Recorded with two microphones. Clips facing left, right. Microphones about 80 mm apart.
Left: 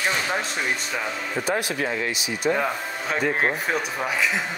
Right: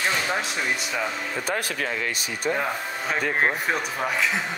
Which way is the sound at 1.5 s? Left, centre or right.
Left.